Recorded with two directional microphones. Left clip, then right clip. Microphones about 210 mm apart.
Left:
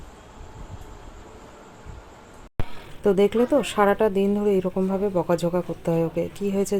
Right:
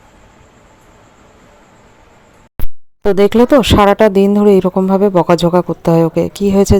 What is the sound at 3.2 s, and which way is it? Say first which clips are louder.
Speech: right 13 dB; 45° right (ahead or behind).